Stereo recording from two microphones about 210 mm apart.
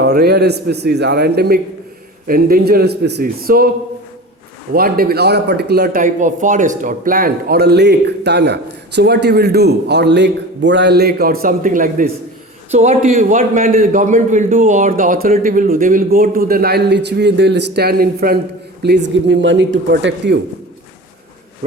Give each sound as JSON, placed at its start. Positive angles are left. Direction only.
{"t": 0.0, "sound": "speech", "side_deg": -50}
{"t": 4.7, "sound": "a man's voice", "side_deg": -45}